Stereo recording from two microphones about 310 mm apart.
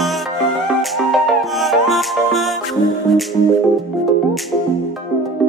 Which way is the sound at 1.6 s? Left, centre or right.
Centre.